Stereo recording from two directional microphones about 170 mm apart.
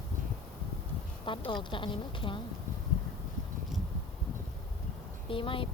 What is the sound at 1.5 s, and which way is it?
Speech, 30° left (ahead or behind).